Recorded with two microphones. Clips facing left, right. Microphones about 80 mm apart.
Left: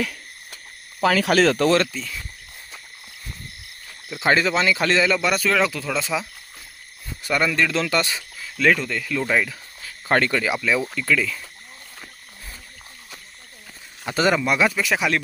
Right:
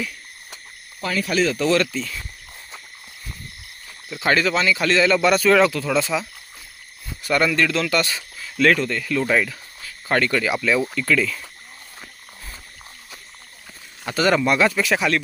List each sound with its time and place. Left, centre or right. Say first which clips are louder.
1.0 s speech: left 4 dB; left
1.5 s speech: left 1 dB; left
1.9 s speech: right 4 dB; centre
4.2 s speech: even; left
4.9 s speech: right 3 dB; centre
7.3 s speech: right 2 dB; centre
7.7 s speech: right 1 dB; left
8.4 s speech: right 2 dB; centre
9.8 s a sound: left 1 dB; left
10.3 s speech: right 2 dB; centre
14.3 s speech: right 2 dB; centre